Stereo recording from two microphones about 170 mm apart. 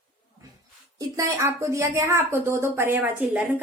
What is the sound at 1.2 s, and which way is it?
A woman's voice, 15° right (ahead or behind).